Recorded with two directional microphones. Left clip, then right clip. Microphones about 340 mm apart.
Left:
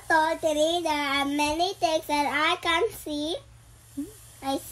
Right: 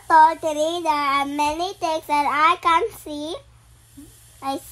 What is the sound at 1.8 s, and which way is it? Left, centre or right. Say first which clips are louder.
A child's voice: right 7 dB; centre.